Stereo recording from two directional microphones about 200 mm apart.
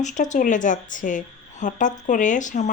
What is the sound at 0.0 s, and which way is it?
A woman's voice, 40° left (ahead or behind).